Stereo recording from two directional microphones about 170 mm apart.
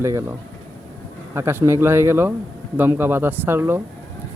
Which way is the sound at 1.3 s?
15° right (ahead or behind).